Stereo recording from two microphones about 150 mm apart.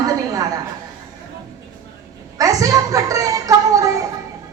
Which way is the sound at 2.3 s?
25° right (ahead or behind).